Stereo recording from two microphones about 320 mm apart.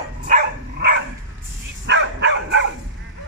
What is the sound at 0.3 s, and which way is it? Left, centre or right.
Dog, right.